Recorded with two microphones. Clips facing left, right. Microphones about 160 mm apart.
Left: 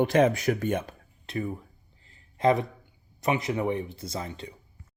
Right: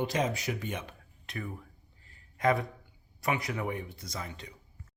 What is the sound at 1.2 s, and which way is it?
Speech, 30° left (ahead or behind).